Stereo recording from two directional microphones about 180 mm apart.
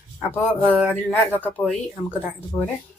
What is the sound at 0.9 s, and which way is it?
Speech, 10° left (ahead or behind).